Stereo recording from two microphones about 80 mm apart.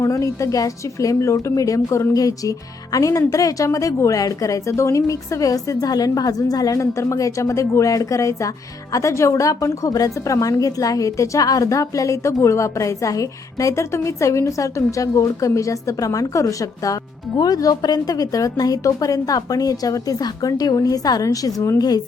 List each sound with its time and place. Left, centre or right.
0.0 s a woman's voice: left
21.8 s speech: left